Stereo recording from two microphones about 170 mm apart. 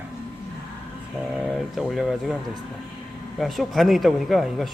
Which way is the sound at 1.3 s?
5° right (ahead or behind).